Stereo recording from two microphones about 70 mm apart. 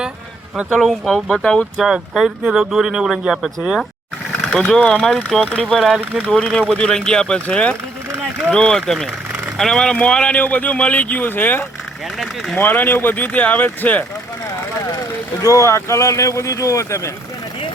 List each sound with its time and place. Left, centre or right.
0.7 s speech: centre
4.8 s speech: centre
5.0 s speech: centre; by 14.0 s left
15.4 s speech: left